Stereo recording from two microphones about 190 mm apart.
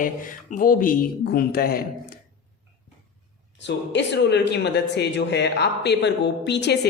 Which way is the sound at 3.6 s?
65° left (ahead or behind).